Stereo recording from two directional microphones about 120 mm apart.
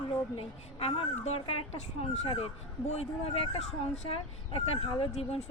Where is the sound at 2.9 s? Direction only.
60° left (ahead or behind).